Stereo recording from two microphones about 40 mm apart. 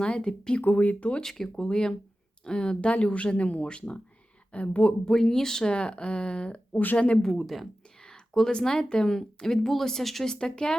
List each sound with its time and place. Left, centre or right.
0.0 s speech: left
0.8 s speech: left
1.2 s speech: centre; by 4.9 s left
5.0 s speech: centre; by 7.2 s left
7.2 s speech: centre
7.4 s speech: centre
8.5 s speech: centre
10.2 s speech: centre